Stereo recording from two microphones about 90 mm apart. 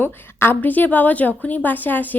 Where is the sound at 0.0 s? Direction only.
25° left (ahead or behind).